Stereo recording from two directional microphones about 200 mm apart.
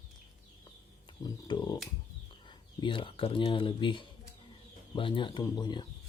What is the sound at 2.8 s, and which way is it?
Speech, 25° left (ahead or behind).